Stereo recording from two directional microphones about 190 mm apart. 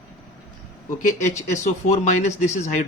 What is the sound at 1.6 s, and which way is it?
Speech, 35° left (ahead or behind).